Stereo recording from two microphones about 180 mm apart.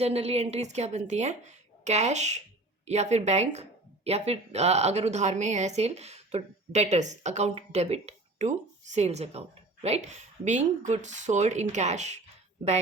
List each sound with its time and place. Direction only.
0.0 s speech: 35° right (ahead or behind)